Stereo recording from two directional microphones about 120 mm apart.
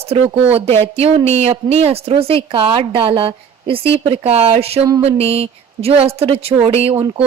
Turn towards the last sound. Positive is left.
turn(degrees=-45)  # may be behind; listen again after turning